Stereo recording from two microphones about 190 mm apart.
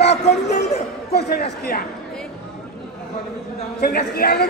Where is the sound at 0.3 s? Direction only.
60° left (ahead or behind).